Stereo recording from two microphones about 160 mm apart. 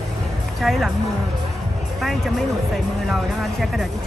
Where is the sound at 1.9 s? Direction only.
Centre (ahead or behind).